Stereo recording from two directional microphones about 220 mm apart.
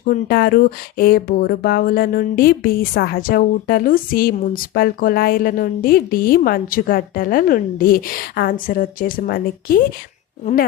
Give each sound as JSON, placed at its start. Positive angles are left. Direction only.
{"t": 0.0, "sound": "speech", "side_deg": 40}